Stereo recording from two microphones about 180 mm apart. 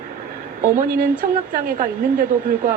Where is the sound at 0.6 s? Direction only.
50° right (ahead or behind).